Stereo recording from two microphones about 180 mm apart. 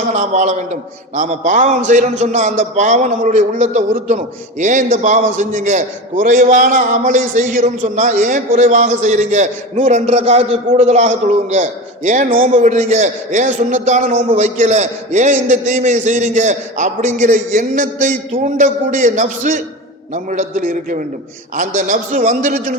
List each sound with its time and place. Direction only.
0.1 s a man's voice: 40° right (ahead or behind)